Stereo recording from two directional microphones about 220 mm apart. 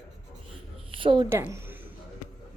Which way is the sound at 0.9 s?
25° right (ahead or behind).